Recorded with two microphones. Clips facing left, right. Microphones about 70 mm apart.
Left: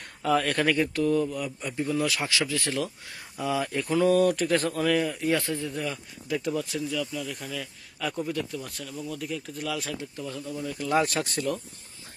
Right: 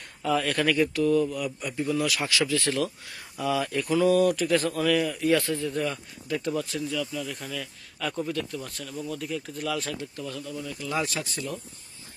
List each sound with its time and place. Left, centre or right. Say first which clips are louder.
0.3 s speech: left 1 dB; left
0.6 s speech: right 1 dB; left
1.5 s speech: right 1 dB; centre
4.1 s speech: even; left
4.8 s speech: right 1 dB; left
5.7 s speech: right 3 dB; centre
10.0 s speech: even; centre
10.6 s speech: left 5 dB; left